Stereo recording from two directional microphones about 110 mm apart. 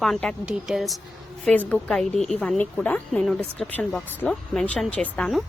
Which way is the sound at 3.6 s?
15° left (ahead or behind).